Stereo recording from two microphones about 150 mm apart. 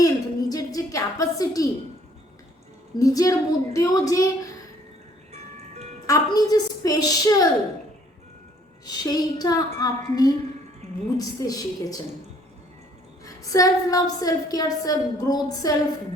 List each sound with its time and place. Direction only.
0.0 s a sound: 25° left (ahead or behind)
3.0 s a woman's voice: 25° left (ahead or behind)
5.3 s music: 50° right (ahead or behind)
6.1 s a woman's voice: 25° left (ahead or behind)
8.9 s a woman's voice: 25° left (ahead or behind)
10.8 s music: 45° right (ahead or behind)
11.2 s a woman's voice: 25° left (ahead or behind)
13.2 s a woman's voice: 25° left (ahead or behind)